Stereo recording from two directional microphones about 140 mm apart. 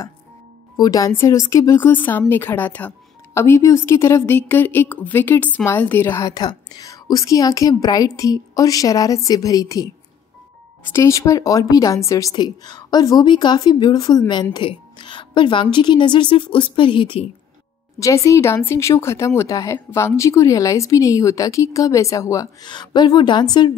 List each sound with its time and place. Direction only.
0.7 s a woman's voice: 25° left (ahead or behind)
10.9 s a woman's voice: 20° left (ahead or behind); by 17.2 s 35° left (ahead or behind)
17.9 s speech: 20° left (ahead or behind)